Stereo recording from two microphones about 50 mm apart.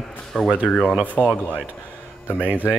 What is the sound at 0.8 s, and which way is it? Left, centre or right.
Speech, centre.